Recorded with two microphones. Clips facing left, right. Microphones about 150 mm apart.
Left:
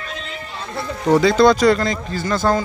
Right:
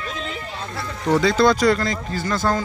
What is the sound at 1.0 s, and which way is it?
Speech, 15° left (ahead or behind).